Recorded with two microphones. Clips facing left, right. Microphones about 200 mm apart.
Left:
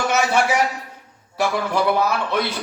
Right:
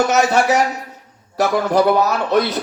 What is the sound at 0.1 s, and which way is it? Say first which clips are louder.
A man's voice: right 4 dB; 45° right (ahead or behind).